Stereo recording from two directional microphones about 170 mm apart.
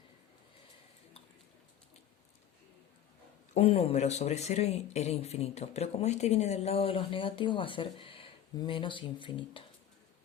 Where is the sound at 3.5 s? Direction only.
35° left (ahead or behind).